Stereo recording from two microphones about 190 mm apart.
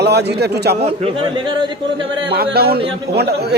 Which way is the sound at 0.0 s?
60° right (ahead or behind).